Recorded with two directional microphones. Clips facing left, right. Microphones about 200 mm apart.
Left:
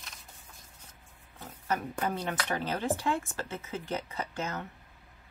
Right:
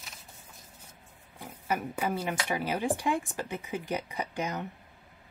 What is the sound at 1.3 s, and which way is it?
Speech, 10° right (ahead or behind).